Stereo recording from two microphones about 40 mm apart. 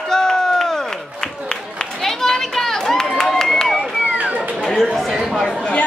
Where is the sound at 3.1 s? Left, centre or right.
Centre.